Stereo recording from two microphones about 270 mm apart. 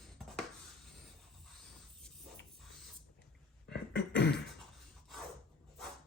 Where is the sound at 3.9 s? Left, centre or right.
Left.